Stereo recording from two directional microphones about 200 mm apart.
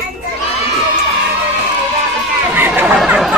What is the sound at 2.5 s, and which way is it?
Chatter, 10° right (ahead or behind).